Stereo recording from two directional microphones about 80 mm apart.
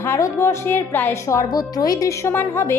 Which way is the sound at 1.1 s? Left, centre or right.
Left.